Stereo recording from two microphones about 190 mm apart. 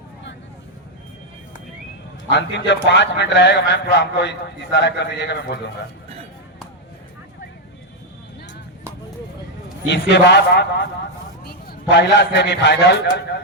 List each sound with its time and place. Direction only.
2.3 s a man's voice: 65° left (ahead or behind)
9.9 s a man's voice: 65° left (ahead or behind)